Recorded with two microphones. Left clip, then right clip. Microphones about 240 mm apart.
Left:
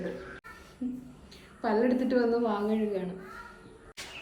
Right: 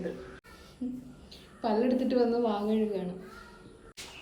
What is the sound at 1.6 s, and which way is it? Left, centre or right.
A woman's voice, centre.